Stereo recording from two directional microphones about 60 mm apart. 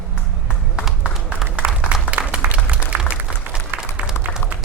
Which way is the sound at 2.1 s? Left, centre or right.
Centre.